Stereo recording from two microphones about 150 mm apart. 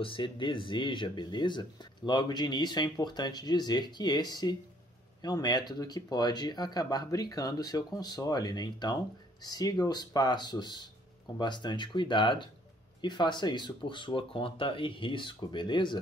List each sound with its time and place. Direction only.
0.0 s speech: 35° left (ahead or behind)